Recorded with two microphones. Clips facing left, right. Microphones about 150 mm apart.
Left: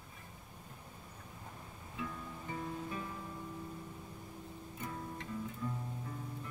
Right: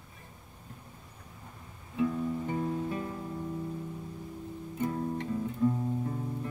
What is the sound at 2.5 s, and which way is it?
Music, 40° right (ahead or behind).